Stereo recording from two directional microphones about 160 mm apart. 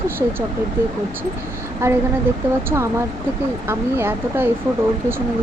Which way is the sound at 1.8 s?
15° right (ahead or behind).